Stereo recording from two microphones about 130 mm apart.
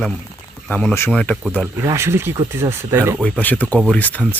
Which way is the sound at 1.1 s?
5° left (ahead or behind).